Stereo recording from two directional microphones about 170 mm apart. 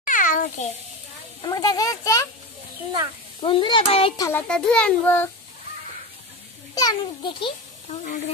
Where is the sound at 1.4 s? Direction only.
25° left (ahead or behind).